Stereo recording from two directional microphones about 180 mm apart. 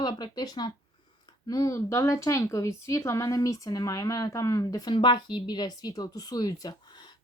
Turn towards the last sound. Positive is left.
turn(degrees=20)  # may be behind; listen again after turning